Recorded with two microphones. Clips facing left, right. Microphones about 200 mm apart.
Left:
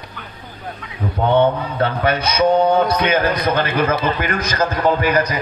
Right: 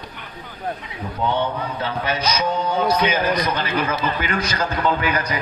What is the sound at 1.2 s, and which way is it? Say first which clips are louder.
A man's voice: left 7 dB; 60° left (ahead or behind).